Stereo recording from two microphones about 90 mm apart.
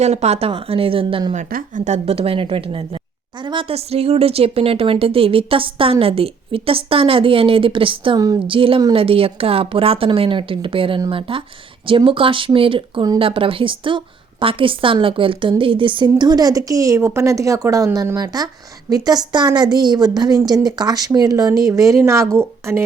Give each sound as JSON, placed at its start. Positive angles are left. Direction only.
{"t": 0.3, "sound": "a woman's voice", "side_deg": -90}
{"t": 3.4, "sound": "a woman's voice", "side_deg": -65}